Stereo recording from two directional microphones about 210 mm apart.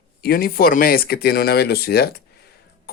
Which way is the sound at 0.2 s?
45° left (ahead or behind).